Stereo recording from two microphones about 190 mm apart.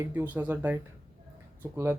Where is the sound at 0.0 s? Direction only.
10° right (ahead or behind).